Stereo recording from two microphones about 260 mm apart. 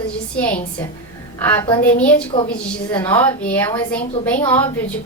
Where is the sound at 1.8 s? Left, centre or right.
Centre.